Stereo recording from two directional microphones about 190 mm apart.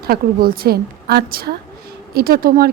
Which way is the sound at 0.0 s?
50° right (ahead or behind).